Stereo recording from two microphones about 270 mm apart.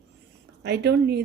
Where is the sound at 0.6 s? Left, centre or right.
Right.